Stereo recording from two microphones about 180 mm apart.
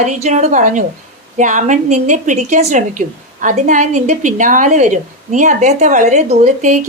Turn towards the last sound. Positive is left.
turn(degrees=-45)  # may be behind; listen again after turning